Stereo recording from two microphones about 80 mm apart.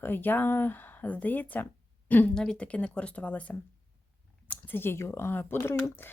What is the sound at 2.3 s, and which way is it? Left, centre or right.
Speech, centre.